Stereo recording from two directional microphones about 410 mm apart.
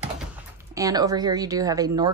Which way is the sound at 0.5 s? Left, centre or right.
Centre.